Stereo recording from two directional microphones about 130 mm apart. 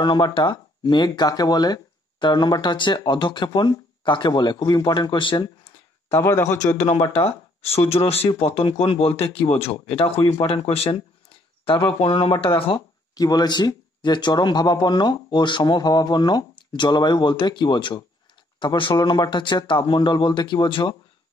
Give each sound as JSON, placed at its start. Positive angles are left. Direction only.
{"t": 0.0, "sound": "speech", "side_deg": 35}
{"t": 6.0, "sound": "speech", "side_deg": 20}
{"t": 7.1, "sound": "speech", "side_deg": 50}
{"t": 13.1, "sound": "speech", "side_deg": 30}